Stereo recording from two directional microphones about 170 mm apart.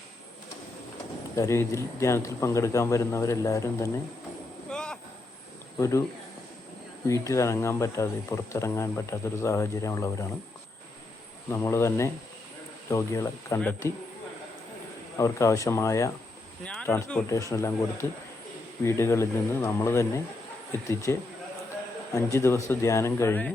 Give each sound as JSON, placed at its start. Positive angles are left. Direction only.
{"t": 1.4, "sound": "speech", "side_deg": 15}
{"t": 4.7, "sound": "a sound", "side_deg": 5}
{"t": 5.8, "sound": "speech", "side_deg": 15}
{"t": 7.1, "sound": "speech", "side_deg": 15}
{"t": 11.5, "sound": "speech", "side_deg": 15}
{"t": 15.2, "sound": "speech", "side_deg": 15}